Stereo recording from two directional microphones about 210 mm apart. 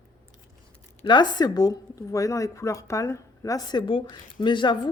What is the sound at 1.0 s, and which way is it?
Speech, 20° left (ahead or behind).